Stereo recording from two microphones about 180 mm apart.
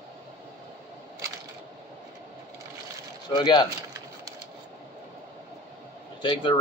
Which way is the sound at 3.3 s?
25° left (ahead or behind).